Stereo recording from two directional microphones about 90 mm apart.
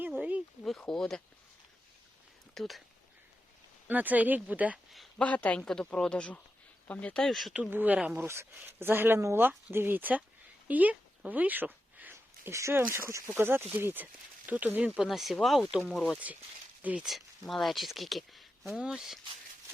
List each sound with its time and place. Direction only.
0.2 s a sound: 15° right (ahead or behind)
0.6 s speech: 5° left (ahead or behind)
2.6 s speech: centre (ahead or behind)
3.8 s speech: 20° right (ahead or behind)
5.1 s speech: 15° left (ahead or behind)
7.7 s speech: 20° right (ahead or behind)
10.7 s a sound: 15° right (ahead or behind)
12.1 s a sound: 30° right (ahead or behind)
12.8 s speech: 25° right (ahead or behind); by 16.1 s centre (ahead or behind)
16.8 s speech: 15° right (ahead or behind)
17.1 s speech: centre (ahead or behind)